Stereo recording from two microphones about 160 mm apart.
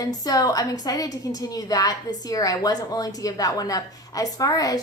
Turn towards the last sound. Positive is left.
turn(degrees=25)  # may be behind; listen again after turning